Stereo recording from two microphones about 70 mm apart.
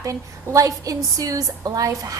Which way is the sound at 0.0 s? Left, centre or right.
Right.